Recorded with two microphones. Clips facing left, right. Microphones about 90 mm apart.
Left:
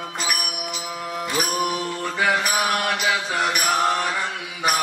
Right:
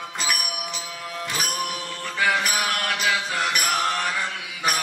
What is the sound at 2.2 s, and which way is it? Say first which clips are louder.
Mantra: left 1 dB; 10° left (ahead or behind).